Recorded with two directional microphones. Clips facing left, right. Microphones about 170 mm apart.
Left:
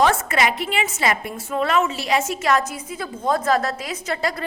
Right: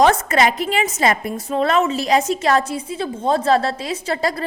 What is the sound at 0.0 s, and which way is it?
A woman's voice, 40° right (ahead or behind).